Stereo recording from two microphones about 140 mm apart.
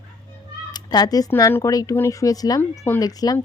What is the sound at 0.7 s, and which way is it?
Cat, 30° left (ahead or behind).